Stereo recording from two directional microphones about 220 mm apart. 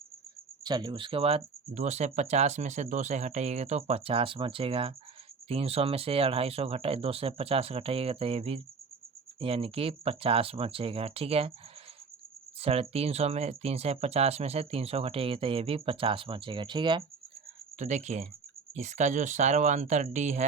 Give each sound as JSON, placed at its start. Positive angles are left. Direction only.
{"t": 0.6, "sound": "speech", "side_deg": -20}
{"t": 12.5, "sound": "speech", "side_deg": -25}
{"t": 17.7, "sound": "speech", "side_deg": -35}